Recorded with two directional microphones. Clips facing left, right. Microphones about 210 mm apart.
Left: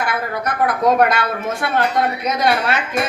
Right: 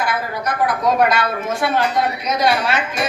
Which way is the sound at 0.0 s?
55° left (ahead or behind).